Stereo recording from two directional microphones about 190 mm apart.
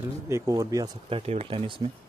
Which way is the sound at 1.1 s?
30° right (ahead or behind).